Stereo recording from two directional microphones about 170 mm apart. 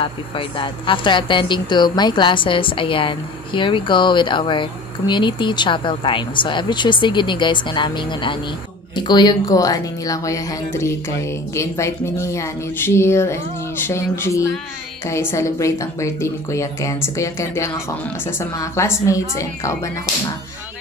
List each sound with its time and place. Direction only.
0.0 s speech: 30° left (ahead or behind)